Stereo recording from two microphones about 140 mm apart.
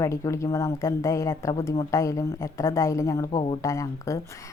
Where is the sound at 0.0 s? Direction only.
20° left (ahead or behind).